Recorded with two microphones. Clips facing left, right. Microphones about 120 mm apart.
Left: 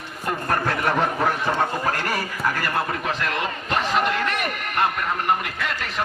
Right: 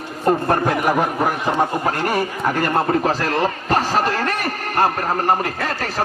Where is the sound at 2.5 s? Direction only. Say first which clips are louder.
Right 7 dB; 30° right (ahead or behind).